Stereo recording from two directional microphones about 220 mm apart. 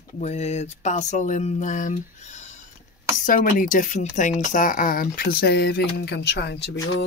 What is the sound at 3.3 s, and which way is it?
Speech, 40° left (ahead or behind).